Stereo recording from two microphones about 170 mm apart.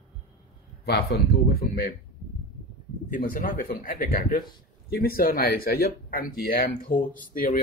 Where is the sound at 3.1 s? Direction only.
55° left (ahead or behind).